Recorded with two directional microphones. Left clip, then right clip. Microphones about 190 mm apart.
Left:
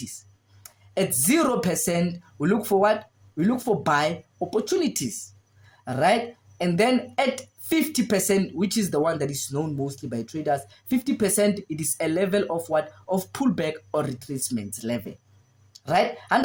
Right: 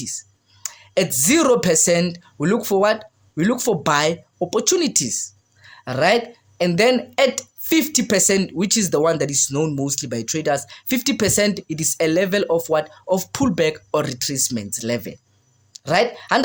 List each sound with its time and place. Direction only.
0.6 s a woman's voice: 45° right (ahead or behind)